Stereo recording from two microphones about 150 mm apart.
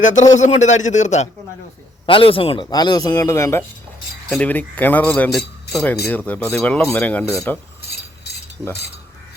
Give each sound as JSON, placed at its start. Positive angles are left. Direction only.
{"t": 0.0, "sound": "a man's voice", "side_deg": 55}
{"t": 2.0, "sound": "a man's voice", "side_deg": 35}
{"t": 2.6, "sound": "speech", "side_deg": 25}
{"t": 4.3, "sound": "speech", "side_deg": 10}